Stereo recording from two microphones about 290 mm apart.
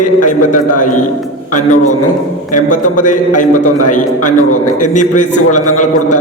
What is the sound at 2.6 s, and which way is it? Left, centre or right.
Speech, left.